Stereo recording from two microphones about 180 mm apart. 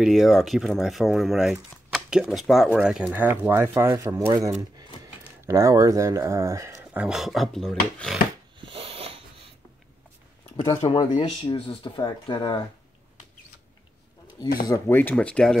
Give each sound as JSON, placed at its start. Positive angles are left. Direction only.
{"t": 0.0, "sound": "speech", "side_deg": 0}
{"t": 5.5, "sound": "speech", "side_deg": -15}
{"t": 8.5, "sound": "a sound", "side_deg": -30}
{"t": 10.5, "sound": "speech", "side_deg": 25}
{"t": 14.7, "sound": "speech", "side_deg": 10}